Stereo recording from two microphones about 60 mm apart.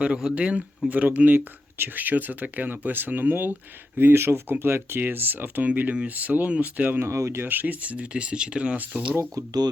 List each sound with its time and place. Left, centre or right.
0.0 s speech: centre
7.0 s speech: right
7.4 s speech: right
9.3 s speech: right